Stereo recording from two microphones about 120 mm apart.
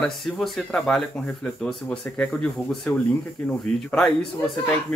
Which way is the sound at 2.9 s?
25° left (ahead or behind).